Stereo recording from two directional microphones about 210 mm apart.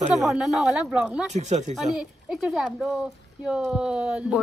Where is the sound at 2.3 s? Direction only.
Centre (ahead or behind).